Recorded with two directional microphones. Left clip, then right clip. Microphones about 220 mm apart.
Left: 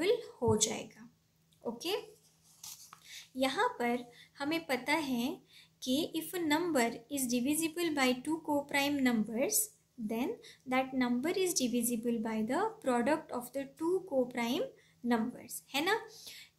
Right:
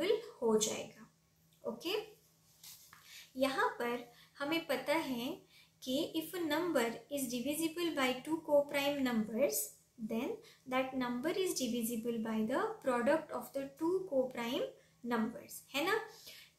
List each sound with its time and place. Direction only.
0.6 s speech: 45° left (ahead or behind)
1.6 s a sound: 45° left (ahead or behind)
3.1 s a woman's voice: 40° left (ahead or behind)